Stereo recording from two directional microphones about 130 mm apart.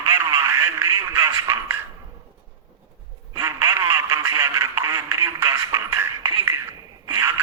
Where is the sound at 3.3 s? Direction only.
20° right (ahead or behind).